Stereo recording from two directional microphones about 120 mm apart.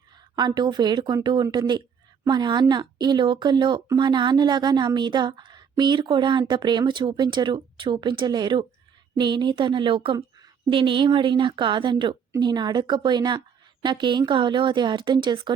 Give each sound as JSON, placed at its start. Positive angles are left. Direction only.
{"t": 0.3, "sound": "a woman's voice", "side_deg": -35}